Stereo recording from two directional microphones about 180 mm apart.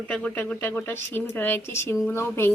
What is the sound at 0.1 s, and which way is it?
A woman's voice, 5° left (ahead or behind).